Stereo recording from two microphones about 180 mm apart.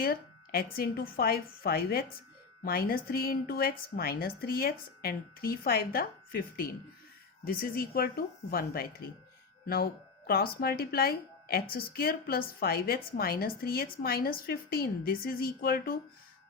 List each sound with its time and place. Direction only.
0.0 s a woman's voice: 55° left (ahead or behind)